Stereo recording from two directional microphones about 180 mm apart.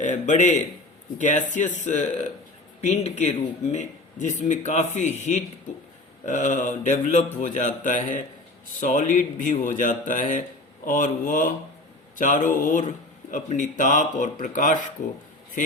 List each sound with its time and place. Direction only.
0.0 s speech: 45° left (ahead or behind)